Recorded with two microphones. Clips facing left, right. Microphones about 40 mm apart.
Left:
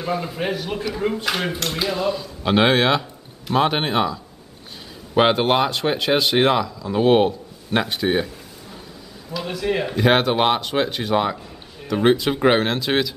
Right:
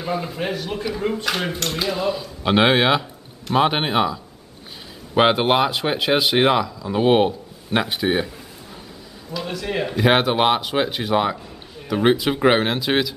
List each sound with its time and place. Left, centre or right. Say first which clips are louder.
0.0 s speech: left 1 dB; centre
9.3 s speech: left 2 dB; centre